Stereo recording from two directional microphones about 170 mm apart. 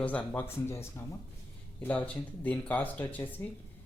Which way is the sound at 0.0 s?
10° left (ahead or behind).